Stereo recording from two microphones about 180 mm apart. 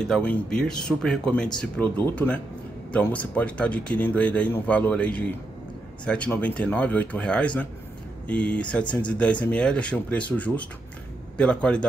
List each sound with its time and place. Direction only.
0.0 s speech: 5° left (ahead or behind)